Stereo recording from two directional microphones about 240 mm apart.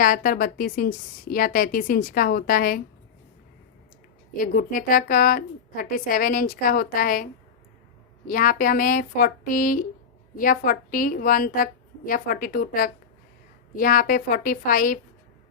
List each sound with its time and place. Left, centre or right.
0.0 s a woman's voice: left
4.4 s a woman's voice: left
8.3 s a woman's voice: left